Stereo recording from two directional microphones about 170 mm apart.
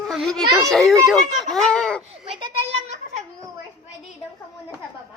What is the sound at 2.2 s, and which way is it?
Children playing, 35° right (ahead or behind).